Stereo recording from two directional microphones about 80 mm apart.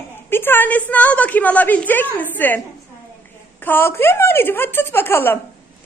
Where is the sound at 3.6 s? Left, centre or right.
Left.